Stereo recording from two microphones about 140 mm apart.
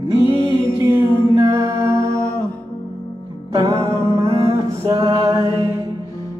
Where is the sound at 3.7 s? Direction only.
20° right (ahead or behind).